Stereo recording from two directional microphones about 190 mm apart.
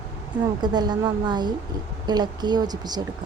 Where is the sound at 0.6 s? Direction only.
20° right (ahead or behind).